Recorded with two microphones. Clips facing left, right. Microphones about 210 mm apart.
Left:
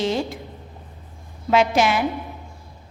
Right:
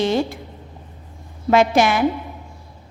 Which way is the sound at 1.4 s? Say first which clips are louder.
Right 3 dB; 50° right (ahead or behind).